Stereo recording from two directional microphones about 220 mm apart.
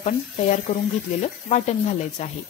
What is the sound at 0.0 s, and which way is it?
A woman's voice, 35° left (ahead or behind).